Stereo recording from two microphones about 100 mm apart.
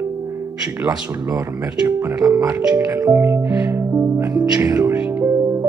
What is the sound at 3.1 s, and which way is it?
Music, 20° right (ahead or behind).